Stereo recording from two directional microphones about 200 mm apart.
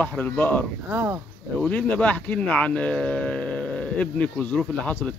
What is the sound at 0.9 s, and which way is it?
Speech, 5° right (ahead or behind).